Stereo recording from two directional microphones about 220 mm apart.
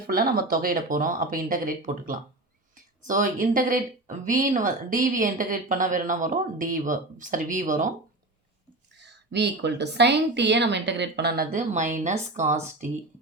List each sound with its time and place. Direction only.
0.1 s speech: 45° right (ahead or behind)
9.3 s speech: 50° right (ahead or behind)
11.5 s speech: 35° right (ahead or behind)